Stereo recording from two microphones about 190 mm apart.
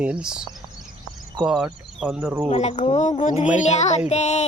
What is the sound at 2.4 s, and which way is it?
A woman's voice, 35° left (ahead or behind).